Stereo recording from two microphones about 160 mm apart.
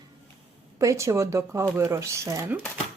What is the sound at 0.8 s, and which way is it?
Speech, 20° right (ahead or behind).